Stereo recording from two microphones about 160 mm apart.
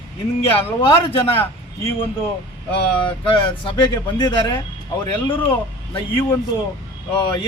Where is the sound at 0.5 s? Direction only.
35° left (ahead or behind).